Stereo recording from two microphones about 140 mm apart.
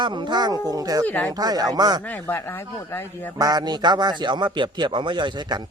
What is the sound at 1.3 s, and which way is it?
Speech, 30° right (ahead or behind).